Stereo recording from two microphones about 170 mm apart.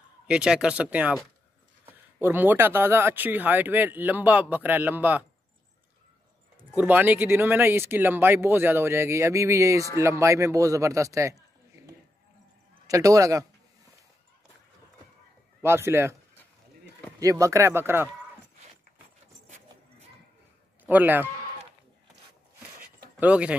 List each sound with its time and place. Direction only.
0.3 s speech: 5° right (ahead or behind)
6.7 s a man's voice: 10° right (ahead or behind)
15.6 s speech: 15° right (ahead or behind)
17.2 s speech: 20° right (ahead or behind)
20.8 s a man's voice: 10° right (ahead or behind)
23.1 s speech: 10° right (ahead or behind)